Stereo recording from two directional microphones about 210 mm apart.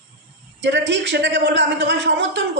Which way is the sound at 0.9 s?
60° right (ahead or behind).